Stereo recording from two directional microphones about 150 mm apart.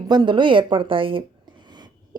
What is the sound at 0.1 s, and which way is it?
A woman's voice, 30° right (ahead or behind).